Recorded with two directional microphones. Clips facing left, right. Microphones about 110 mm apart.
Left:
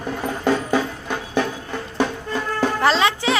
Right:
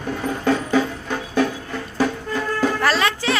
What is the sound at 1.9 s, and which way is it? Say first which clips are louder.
Music: right 1 dB; 25° left (ahead or behind).